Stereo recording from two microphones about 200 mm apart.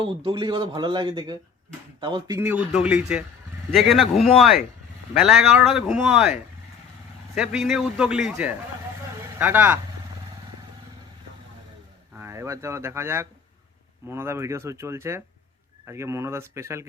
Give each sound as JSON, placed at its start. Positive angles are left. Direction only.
{"t": 0.3, "sound": "a man's voice", "side_deg": -25}
{"t": 7.3, "sound": "a man's voice", "side_deg": 0}
{"t": 12.2, "sound": "a man's voice", "side_deg": -15}